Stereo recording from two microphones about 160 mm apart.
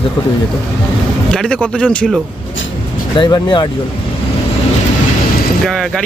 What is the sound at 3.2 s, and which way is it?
Speech, 30° left (ahead or behind).